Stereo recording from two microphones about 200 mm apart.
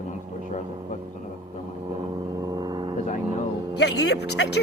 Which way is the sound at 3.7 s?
55° left (ahead or behind).